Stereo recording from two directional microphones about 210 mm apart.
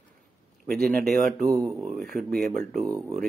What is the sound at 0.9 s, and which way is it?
Speech, 45° right (ahead or behind).